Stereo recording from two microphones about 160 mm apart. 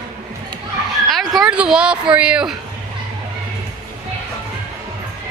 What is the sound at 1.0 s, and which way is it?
Speech, centre (ahead or behind).